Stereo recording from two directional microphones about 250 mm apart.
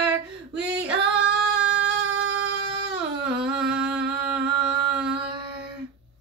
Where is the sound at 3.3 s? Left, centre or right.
Centre.